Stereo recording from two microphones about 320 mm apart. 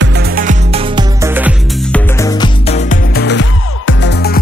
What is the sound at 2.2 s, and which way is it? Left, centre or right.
Music, centre.